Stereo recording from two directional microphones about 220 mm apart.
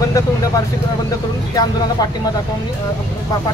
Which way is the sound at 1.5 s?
15° left (ahead or behind).